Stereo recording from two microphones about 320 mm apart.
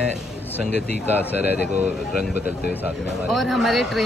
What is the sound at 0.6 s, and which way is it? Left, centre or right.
Speech, right.